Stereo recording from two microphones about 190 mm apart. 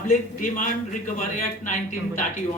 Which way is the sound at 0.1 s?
40° left (ahead or behind).